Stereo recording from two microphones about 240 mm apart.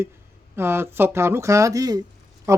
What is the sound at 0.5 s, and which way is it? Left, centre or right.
A man's voice, centre.